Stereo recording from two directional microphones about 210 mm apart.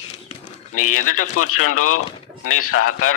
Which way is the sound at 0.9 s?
40° left (ahead or behind).